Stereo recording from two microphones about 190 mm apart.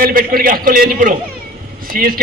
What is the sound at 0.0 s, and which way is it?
A man's voice, 50° right (ahead or behind).